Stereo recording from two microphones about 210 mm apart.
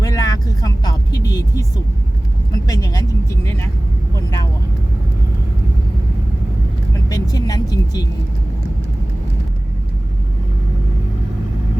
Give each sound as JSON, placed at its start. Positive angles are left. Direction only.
{"t": 0.0, "sound": "vehicle", "side_deg": 15}
{"t": 2.6, "sound": "vehicle", "side_deg": 15}
{"t": 7.1, "sound": "vehicle", "side_deg": 20}